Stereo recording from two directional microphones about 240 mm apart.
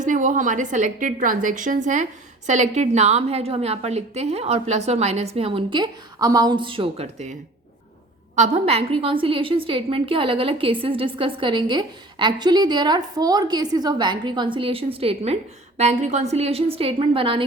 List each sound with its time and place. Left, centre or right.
0.0 s a woman's voice: right
8.4 s a woman's voice: right